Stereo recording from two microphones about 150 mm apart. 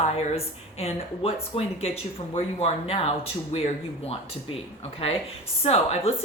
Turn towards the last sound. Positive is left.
turn(degrees=40)  # may be behind; listen again after turning